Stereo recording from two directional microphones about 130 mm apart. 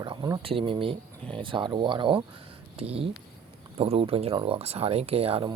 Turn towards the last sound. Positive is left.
turn(degrees=-50)  # may be behind; listen again after turning